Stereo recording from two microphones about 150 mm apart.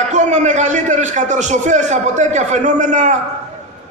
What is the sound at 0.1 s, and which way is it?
A man's voice, 50° right (ahead or behind).